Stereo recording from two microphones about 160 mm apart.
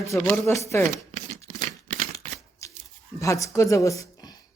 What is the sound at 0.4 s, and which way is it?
Speech, 20° left (ahead or behind).